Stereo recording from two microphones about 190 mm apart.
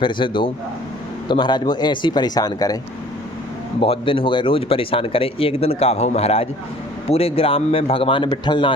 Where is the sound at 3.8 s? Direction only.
30° left (ahead or behind).